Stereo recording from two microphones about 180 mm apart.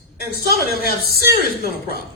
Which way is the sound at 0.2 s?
60° left (ahead or behind).